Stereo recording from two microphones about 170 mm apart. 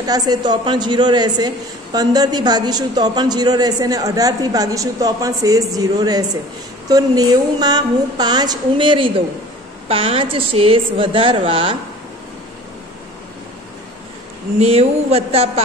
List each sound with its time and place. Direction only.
0.0 s a man's voice: 25° right (ahead or behind)
14.6 s a woman's voice: 35° right (ahead or behind)